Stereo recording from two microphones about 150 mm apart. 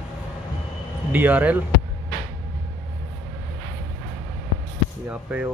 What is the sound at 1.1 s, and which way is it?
Speech, 10° right (ahead or behind).